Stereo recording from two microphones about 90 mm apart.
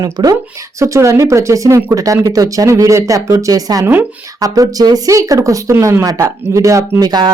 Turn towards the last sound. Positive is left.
turn(degrees=-50)  # may be behind; listen again after turning